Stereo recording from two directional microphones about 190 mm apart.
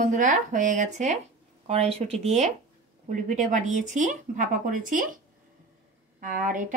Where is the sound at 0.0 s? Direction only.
40° right (ahead or behind).